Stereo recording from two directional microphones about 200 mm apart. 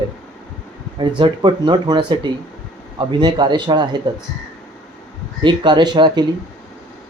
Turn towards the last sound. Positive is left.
turn(degrees=-20)  # may be behind; listen again after turning